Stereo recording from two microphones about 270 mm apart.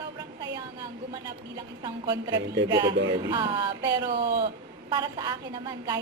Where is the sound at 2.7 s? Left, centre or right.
Centre.